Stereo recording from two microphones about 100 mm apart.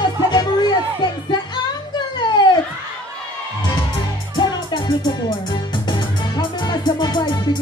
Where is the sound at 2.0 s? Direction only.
45° left (ahead or behind).